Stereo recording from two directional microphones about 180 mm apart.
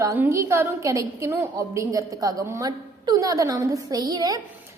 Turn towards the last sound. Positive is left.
turn(degrees=-20)  # may be behind; listen again after turning